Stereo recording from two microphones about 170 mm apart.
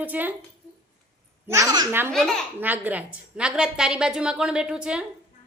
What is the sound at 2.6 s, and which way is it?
A child's voice, 10° right (ahead or behind).